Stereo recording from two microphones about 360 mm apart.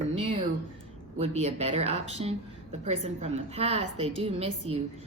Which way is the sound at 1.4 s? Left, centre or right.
Centre.